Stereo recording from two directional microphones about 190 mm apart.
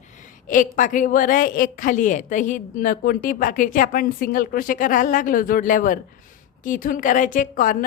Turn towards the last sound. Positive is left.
turn(degrees=45)  # may be behind; listen again after turning